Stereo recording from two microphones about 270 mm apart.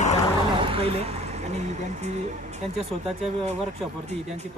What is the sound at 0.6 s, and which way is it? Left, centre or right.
Speech, right.